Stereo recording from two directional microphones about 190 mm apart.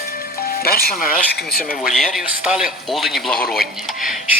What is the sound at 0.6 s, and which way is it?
Speech, 50° left (ahead or behind).